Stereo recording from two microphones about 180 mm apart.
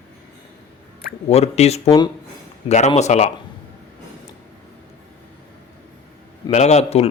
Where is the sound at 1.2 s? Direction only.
35° left (ahead or behind).